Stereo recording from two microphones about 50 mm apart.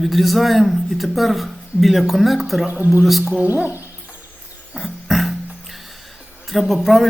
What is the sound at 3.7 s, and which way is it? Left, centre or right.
Bird, right.